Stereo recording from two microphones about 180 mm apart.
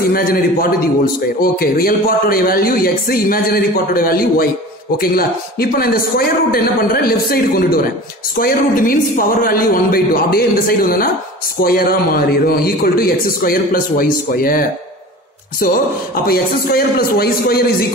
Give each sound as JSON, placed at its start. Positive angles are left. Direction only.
{"t": 0.1, "sound": "a man's voice", "side_deg": 55}
{"t": 16.3, "sound": "a man's voice", "side_deg": 60}